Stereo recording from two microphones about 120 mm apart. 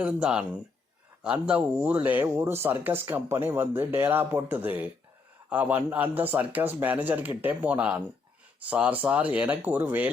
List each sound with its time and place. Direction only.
0.0 s speech: 10° right (ahead or behind)